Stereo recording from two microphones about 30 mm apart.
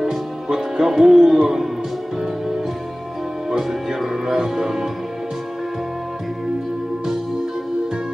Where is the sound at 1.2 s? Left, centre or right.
Right.